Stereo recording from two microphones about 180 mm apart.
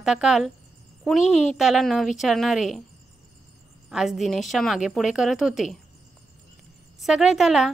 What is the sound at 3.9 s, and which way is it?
A woman's voice, centre (ahead or behind).